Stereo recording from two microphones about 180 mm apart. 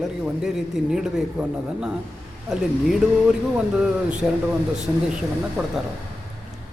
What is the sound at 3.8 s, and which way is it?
Speech, 5° right (ahead or behind).